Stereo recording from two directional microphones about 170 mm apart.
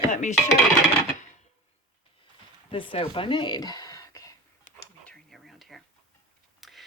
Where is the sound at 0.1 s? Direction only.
45° left (ahead or behind).